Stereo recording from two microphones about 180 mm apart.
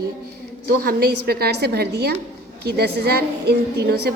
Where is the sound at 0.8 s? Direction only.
55° right (ahead or behind).